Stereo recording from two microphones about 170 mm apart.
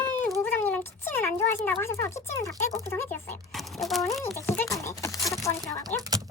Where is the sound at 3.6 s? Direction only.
Centre (ahead or behind).